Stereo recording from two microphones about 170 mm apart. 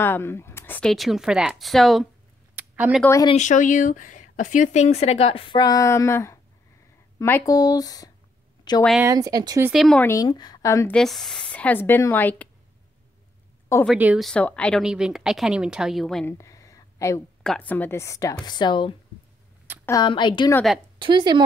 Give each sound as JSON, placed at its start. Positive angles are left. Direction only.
{"t": 0.0, "sound": "a woman's voice", "side_deg": 15}
{"t": 0.8, "sound": "speech", "side_deg": 0}
{"t": 2.5, "sound": "a sound", "side_deg": -10}
{"t": 3.0, "sound": "a woman's voice", "side_deg": 15}
{"t": 3.3, "sound": "speech", "side_deg": 45}
{"t": 9.0, "sound": "speech", "side_deg": -20}
{"t": 9.7, "sound": "speech", "side_deg": 0}
{"t": 10.0, "sound": "speech", "side_deg": 20}
{"t": 10.9, "sound": "a woman's voice", "side_deg": 0}
{"t": 13.9, "sound": "speech", "side_deg": -10}
{"t": 14.2, "sound": "speech", "side_deg": 5}
{"t": 16.3, "sound": "a sound", "side_deg": 15}
{"t": 17.4, "sound": "a woman's voice", "side_deg": 5}
{"t": 21.0, "sound": "speech", "side_deg": -25}